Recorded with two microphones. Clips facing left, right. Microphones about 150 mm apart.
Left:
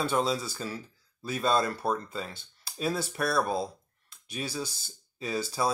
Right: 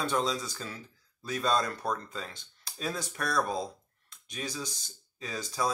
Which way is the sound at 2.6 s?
5° left (ahead or behind).